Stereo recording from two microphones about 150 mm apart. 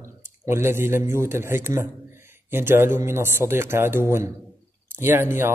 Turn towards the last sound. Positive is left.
turn(degrees=-15)  # may be behind; listen again after turning